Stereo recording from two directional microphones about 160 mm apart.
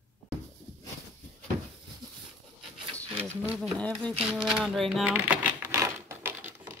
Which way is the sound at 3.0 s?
10° left (ahead or behind).